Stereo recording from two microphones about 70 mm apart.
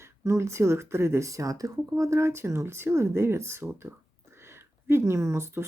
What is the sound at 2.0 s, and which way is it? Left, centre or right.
Speech, right.